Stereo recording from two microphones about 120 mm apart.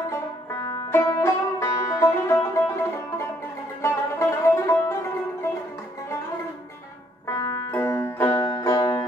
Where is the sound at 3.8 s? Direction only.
20° left (ahead or behind).